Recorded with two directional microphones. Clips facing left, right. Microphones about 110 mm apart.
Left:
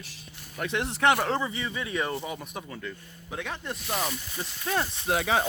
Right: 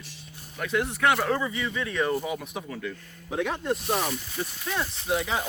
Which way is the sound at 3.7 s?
40° right (ahead or behind).